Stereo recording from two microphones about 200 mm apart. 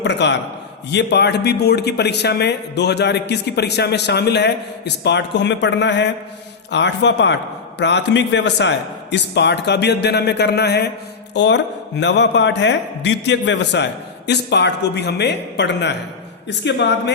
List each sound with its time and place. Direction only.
0.0 s a man's voice: 60° left (ahead or behind)